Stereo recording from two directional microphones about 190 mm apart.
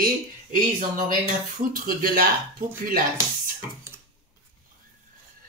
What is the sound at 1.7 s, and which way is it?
Speech, 50° right (ahead or behind).